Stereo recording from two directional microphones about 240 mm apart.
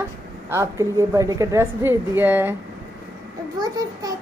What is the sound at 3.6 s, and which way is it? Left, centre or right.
Speech, centre.